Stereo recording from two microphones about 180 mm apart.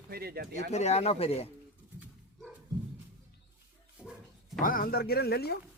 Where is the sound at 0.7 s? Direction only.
40° left (ahead or behind).